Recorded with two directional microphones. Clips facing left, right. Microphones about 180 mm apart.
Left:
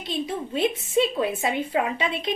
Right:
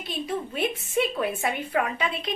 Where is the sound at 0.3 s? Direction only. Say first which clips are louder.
Left 2 dB; 25° left (ahead or behind).